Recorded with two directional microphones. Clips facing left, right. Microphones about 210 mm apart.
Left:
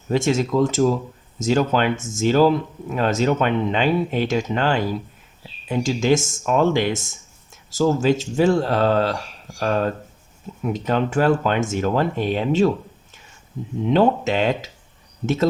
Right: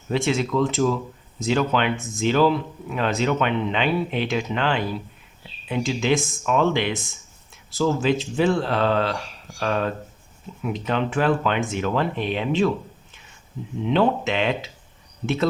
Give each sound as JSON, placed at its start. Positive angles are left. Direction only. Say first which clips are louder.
{"t": 0.1, "sound": "speech", "louder": "left 3 dB", "side_deg": 45}
{"t": 13.8, "sound": "speech", "louder": "left 3 dB", "side_deg": 40}